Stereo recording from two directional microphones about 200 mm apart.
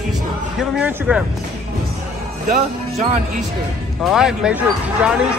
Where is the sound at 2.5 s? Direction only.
40° right (ahead or behind).